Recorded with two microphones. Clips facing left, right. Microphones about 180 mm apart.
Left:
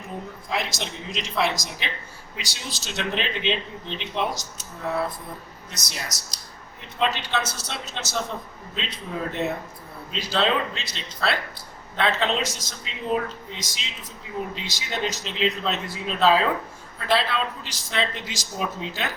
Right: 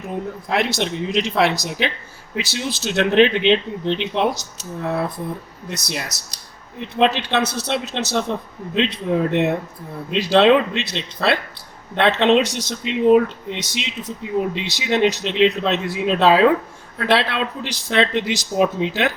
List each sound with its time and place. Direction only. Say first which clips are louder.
0.4 s a man's voice: right 8 dB; 65° right (ahead or behind)
5.7 s a man's voice: right 8 dB; 65° right (ahead or behind)